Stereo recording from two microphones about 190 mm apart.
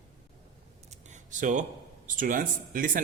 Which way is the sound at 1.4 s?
40° right (ahead or behind).